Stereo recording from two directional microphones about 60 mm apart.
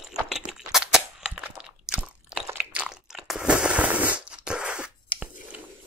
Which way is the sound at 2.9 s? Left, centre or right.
Centre.